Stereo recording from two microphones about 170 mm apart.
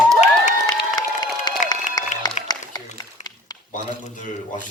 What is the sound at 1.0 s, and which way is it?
Crowd, 25° left (ahead or behind).